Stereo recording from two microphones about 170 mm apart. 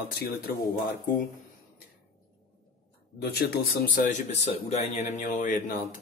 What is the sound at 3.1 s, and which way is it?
Speech, 85° left.